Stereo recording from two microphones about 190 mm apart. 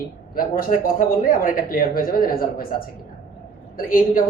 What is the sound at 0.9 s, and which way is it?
A woman's voice, 45° left (ahead or behind).